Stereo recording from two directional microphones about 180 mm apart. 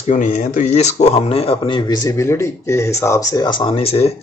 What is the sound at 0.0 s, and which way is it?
A man's voice, 45° left (ahead or behind).